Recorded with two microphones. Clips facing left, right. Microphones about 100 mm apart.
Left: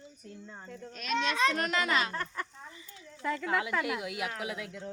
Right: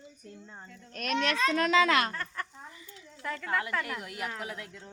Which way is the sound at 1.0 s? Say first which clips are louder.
Right 2 dB; 60° right (ahead or behind).